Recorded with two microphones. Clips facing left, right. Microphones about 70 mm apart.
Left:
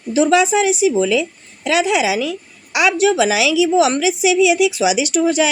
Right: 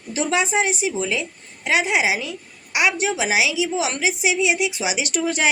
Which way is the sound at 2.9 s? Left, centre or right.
Left.